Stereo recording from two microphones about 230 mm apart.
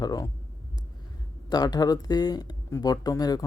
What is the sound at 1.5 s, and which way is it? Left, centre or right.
Speech, centre.